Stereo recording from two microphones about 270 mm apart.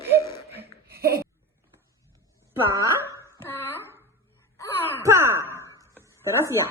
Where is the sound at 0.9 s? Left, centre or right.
Right.